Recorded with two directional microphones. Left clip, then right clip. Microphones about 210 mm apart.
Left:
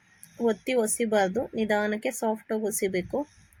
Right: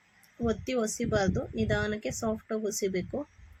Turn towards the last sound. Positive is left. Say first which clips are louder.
# left 3 dB
turn(degrees=15)  # may be behind; listen again after turning